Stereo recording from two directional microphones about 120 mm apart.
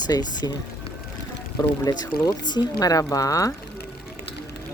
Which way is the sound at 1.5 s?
30° left (ahead or behind).